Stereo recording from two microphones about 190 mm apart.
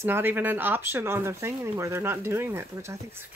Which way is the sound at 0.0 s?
10° right (ahead or behind).